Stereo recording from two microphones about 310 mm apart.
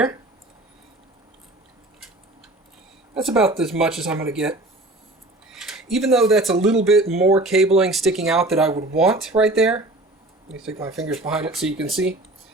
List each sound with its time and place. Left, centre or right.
3.2 s speech: centre
5.6 s speech: centre